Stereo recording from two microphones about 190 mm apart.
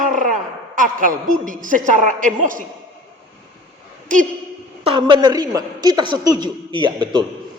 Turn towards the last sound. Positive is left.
turn(degrees=-25)  # may be behind; listen again after turning